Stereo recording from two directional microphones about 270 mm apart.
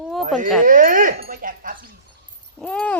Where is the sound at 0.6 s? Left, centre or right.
Right.